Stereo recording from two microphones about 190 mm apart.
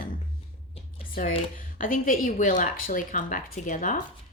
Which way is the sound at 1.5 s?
45° left (ahead or behind).